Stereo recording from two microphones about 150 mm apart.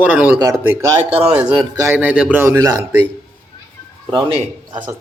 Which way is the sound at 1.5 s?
25° right (ahead or behind).